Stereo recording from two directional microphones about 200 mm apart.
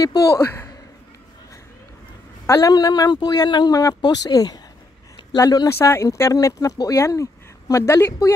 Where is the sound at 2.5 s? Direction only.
20° left (ahead or behind).